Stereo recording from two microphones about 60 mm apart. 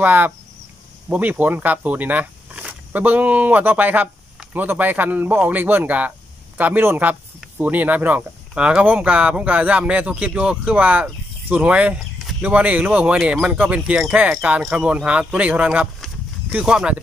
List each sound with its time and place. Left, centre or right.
0.0 s speech: right
8.5 s speech: centre